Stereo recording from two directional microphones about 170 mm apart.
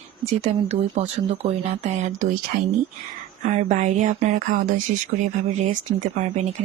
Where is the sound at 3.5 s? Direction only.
45° right (ahead or behind).